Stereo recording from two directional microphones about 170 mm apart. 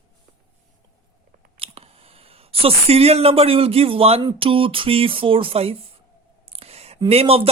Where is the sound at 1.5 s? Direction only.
35° right (ahead or behind).